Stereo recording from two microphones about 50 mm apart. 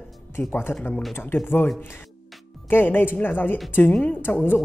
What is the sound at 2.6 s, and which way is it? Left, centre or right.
Speech, left.